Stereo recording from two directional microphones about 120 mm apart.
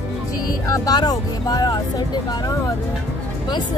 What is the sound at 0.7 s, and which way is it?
Speech, 30° left (ahead or behind).